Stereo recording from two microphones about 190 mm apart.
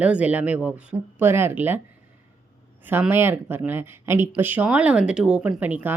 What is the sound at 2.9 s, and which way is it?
Speech, 10° right (ahead or behind).